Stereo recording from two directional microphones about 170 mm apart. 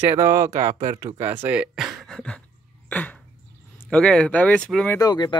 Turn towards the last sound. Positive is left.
turn(degrees=25)  # may be behind; listen again after turning